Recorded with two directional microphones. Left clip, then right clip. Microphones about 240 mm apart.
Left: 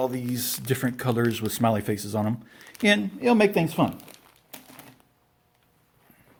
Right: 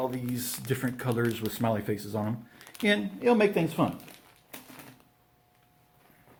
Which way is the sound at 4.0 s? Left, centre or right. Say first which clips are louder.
Left 1 dB; left.